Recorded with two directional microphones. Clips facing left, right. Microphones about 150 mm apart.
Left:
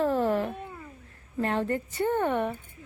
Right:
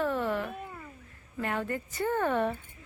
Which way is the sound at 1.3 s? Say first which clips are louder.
Left 5 dB; 30° left (ahead or behind).